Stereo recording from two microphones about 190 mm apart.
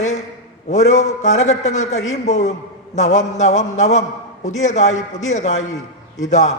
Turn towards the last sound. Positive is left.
turn(degrees=40)  # may be behind; listen again after turning